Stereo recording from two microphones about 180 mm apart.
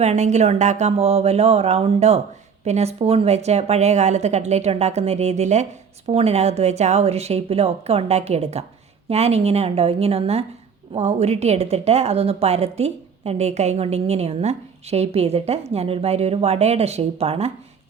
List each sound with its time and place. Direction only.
0.0 s a woman's voice: 40° right (ahead or behind)